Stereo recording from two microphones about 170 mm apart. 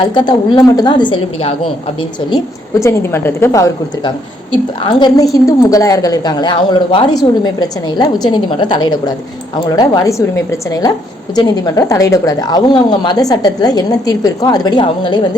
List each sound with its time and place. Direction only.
0.0 s a woman's voice: 25° left (ahead or behind)
2.8 s a woman's voice: 15° left (ahead or behind)